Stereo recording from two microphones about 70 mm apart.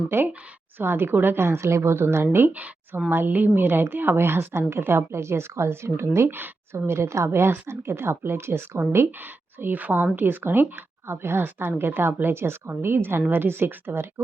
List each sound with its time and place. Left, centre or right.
0.1 s a woman's voice: right